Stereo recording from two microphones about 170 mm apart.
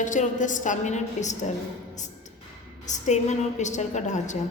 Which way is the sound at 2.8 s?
45° left (ahead or behind).